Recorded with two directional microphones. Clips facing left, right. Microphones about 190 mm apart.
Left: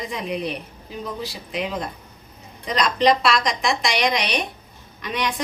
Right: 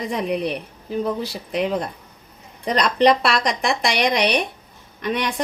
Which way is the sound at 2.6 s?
60° right (ahead or behind).